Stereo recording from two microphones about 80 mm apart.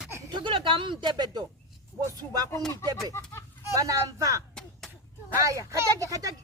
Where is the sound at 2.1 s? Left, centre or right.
Right.